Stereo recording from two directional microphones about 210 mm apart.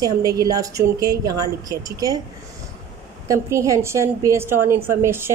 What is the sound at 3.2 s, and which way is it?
A woman's voice, 15° right (ahead or behind).